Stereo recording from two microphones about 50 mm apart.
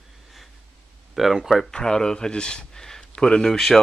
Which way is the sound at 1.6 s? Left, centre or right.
Centre.